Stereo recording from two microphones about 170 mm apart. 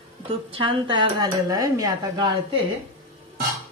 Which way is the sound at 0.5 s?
30° right (ahead or behind).